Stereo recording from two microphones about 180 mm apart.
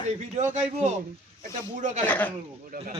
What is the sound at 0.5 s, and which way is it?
A man's voice, 40° right (ahead or behind).